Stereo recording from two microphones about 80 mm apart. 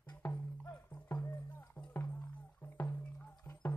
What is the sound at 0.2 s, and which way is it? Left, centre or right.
Music, left.